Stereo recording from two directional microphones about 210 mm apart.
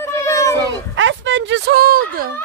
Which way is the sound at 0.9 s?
60° right (ahead or behind).